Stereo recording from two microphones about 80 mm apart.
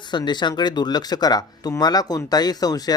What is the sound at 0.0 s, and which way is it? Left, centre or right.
Speech, left.